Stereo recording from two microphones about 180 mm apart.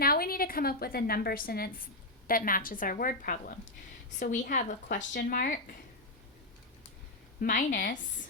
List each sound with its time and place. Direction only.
0.0 s a woman's voice: 55° left (ahead or behind)
7.4 s speech: 50° left (ahead or behind)